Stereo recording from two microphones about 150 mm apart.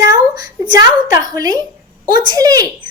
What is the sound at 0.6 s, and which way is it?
Speech, 25° right (ahead or behind).